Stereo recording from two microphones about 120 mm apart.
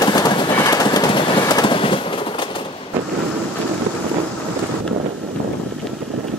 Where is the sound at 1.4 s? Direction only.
35° left (ahead or behind).